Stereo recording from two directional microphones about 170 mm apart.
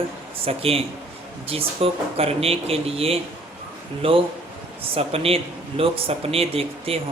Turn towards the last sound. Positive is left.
turn(degrees=-35)  # may be behind; listen again after turning